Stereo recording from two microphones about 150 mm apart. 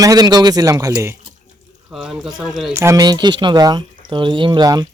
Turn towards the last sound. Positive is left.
turn(degrees=-25)  # may be behind; listen again after turning